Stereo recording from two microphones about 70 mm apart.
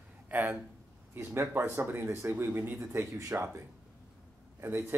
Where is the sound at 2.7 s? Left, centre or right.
Right.